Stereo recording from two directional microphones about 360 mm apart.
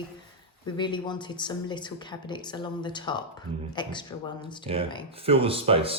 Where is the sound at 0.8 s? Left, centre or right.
Centre.